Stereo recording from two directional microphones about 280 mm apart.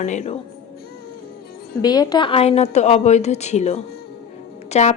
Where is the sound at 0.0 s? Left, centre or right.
Left.